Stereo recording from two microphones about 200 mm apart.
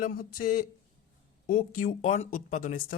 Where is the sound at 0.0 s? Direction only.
45° left (ahead or behind).